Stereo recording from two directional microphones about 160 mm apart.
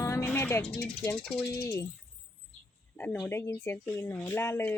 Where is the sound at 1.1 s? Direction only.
5° left (ahead or behind).